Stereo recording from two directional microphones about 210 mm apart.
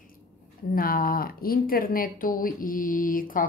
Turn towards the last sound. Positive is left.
turn(degrees=40)  # may be behind; listen again after turning